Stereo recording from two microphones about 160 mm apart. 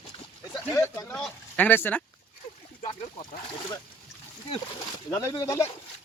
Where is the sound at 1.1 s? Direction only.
10° left (ahead or behind).